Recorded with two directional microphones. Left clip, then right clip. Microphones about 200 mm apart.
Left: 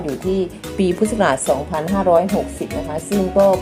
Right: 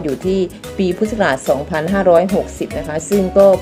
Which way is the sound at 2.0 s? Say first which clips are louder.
Right 3 dB; 20° right (ahead or behind).